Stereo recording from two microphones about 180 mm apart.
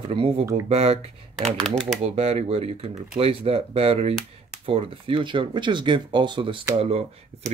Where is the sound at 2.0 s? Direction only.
35° right (ahead or behind).